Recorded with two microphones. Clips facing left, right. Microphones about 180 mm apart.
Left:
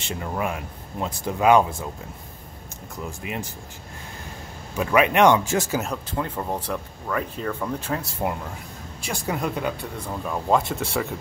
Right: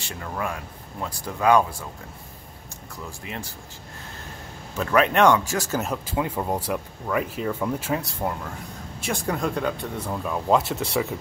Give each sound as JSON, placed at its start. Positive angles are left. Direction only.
{"t": 0.0, "sound": "speech", "side_deg": 20}
{"t": 3.1, "sound": "speech", "side_deg": 15}
{"t": 4.7, "sound": "speech", "side_deg": 10}
{"t": 5.7, "sound": "speech", "side_deg": 0}